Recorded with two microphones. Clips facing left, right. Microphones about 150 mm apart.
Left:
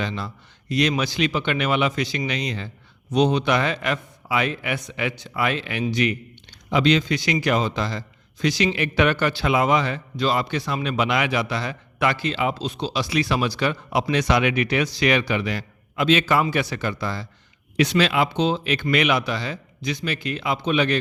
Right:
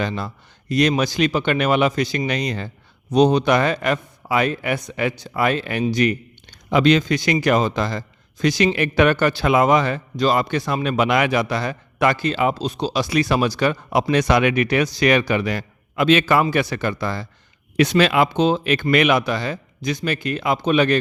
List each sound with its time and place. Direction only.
0.0 s a man's voice: 45° right (ahead or behind)